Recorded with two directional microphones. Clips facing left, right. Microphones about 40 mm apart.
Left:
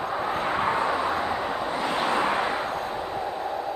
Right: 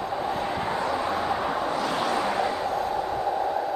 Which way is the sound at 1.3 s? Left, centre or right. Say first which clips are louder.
Right 1 dB; centre.